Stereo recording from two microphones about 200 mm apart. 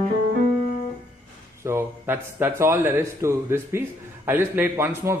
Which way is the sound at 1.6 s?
15° right (ahead or behind).